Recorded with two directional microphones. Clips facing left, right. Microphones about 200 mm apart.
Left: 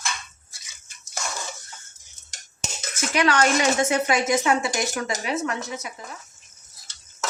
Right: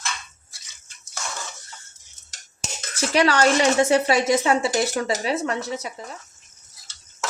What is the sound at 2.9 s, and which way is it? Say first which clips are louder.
Speech: right 2 dB; 35° right (ahead or behind).